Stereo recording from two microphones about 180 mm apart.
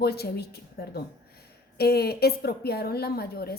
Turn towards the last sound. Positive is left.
turn(degrees=60)  # may be behind; listen again after turning